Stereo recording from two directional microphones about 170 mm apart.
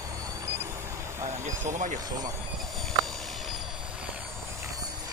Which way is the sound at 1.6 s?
45° right (ahead or behind).